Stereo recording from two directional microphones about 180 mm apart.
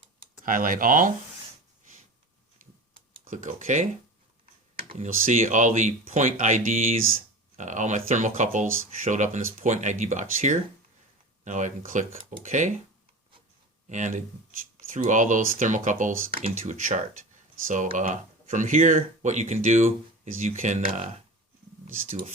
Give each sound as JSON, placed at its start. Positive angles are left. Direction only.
{"t": 0.4, "sound": "speech", "side_deg": -50}
{"t": 3.2, "sound": "speech", "side_deg": -45}
{"t": 4.9, "sound": "speech", "side_deg": -45}
{"t": 13.9, "sound": "speech", "side_deg": -45}